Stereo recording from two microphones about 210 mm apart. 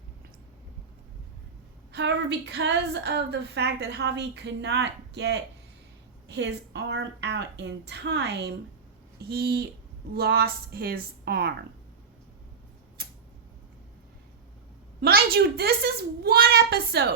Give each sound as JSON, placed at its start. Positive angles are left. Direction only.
{"t": 1.9, "sound": "a woman's voice", "side_deg": -55}
{"t": 15.0, "sound": "a woman's voice", "side_deg": -50}